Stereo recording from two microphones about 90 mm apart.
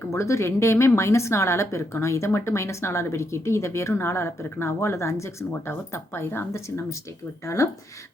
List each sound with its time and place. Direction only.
0.1 s speech: 30° left (ahead or behind)